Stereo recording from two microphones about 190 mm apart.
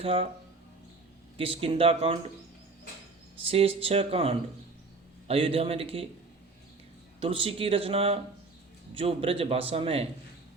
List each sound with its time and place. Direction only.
0.0 s speech: 30° right (ahead or behind)
1.4 s speech: 30° right (ahead or behind)
3.4 s a man's voice: 30° right (ahead or behind)
7.2 s a man's voice: 30° right (ahead or behind)